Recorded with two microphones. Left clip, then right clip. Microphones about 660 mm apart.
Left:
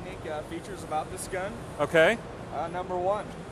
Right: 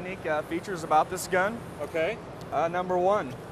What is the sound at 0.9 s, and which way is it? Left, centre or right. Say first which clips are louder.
Speech: right 9 dB; right.